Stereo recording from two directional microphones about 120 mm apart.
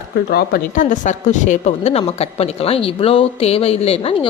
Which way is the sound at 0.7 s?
90° left.